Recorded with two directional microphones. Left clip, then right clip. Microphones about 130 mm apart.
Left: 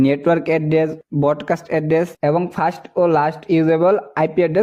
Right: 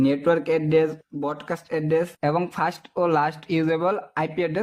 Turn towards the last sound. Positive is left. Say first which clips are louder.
# left 8 dB
turn(degrees=45)  # may be behind; listen again after turning